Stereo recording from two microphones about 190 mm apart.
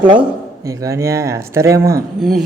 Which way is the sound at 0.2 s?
15° right (ahead or behind).